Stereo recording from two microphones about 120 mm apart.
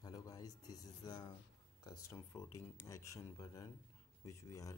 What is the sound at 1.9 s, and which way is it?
Speech, 25° left (ahead or behind).